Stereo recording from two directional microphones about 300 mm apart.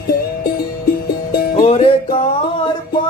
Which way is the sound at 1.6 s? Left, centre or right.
Centre.